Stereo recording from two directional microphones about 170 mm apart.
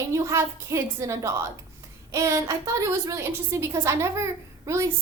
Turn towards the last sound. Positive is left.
turn(degrees=-15)  # may be behind; listen again after turning